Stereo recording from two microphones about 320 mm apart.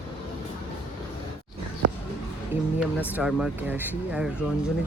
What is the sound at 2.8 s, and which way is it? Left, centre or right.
Speech, centre.